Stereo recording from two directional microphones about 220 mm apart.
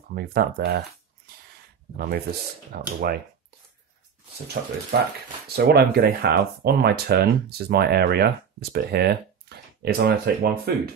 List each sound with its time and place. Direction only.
0.1 s speech: 45° right (ahead or behind)
4.6 s speech: 45° right (ahead or behind)